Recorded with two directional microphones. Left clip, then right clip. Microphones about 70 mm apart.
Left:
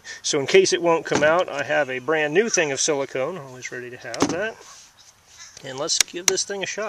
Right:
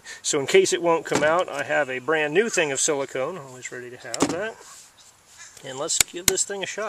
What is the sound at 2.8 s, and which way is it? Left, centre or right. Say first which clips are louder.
Speech: left 2 dB; left.